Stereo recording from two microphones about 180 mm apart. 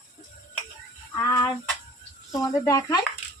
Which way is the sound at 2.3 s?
20° left (ahead or behind).